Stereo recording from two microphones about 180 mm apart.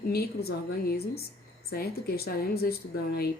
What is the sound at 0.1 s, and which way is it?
Speech, 60° left (ahead or behind).